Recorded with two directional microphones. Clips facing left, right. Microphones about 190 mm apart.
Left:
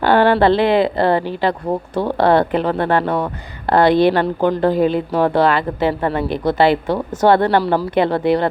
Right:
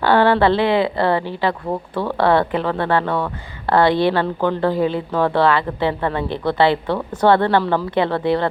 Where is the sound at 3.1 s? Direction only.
20° left (ahead or behind).